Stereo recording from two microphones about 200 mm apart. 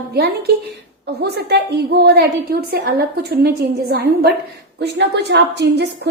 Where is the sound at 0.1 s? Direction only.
55° right (ahead or behind).